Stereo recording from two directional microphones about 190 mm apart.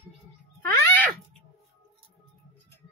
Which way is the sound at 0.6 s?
10° left (ahead or behind).